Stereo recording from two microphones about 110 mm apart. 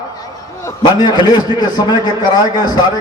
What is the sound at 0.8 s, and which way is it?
A man's voice, 40° left (ahead or behind).